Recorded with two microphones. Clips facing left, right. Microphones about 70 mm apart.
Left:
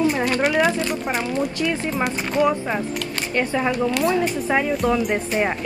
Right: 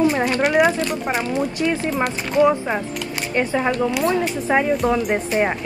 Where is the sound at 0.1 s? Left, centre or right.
Centre.